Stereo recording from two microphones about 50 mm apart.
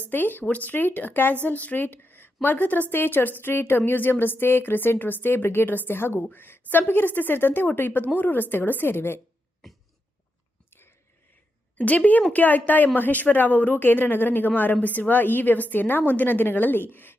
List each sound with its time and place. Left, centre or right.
0.1 s a woman's voice: left
2.9 s speech: left
11.8 s a woman's voice: left